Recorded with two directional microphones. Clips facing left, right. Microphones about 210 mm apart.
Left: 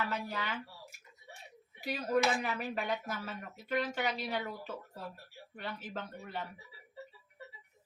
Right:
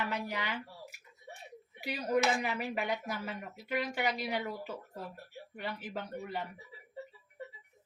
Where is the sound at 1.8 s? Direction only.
15° right (ahead or behind).